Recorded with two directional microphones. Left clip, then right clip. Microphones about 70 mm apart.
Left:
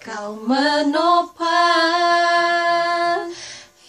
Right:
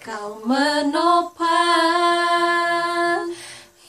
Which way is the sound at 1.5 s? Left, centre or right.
Centre.